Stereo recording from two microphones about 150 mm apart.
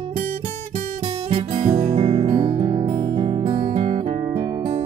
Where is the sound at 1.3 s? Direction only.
40° right (ahead or behind).